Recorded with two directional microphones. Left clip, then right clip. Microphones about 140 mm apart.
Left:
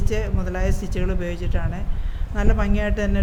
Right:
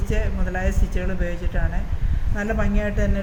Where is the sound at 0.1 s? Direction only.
80° left.